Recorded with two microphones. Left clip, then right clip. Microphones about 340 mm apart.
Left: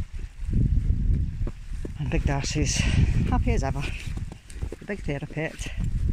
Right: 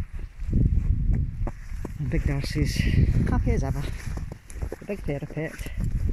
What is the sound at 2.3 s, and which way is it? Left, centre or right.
Speech, centre.